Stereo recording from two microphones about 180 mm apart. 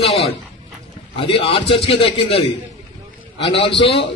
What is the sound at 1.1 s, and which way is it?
A man's voice, 30° left (ahead or behind).